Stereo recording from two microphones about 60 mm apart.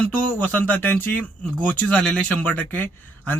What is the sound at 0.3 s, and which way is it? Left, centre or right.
Speech, left.